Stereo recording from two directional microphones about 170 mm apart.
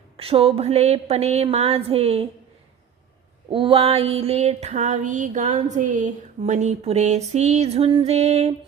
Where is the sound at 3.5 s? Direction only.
30° right (ahead or behind).